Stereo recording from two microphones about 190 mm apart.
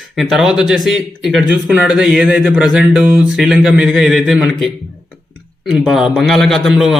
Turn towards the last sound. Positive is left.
turn(degrees=0)  # may be behind; listen again after turning